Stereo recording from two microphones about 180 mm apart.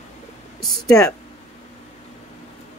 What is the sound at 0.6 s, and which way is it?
Speech, 5° left (ahead or behind).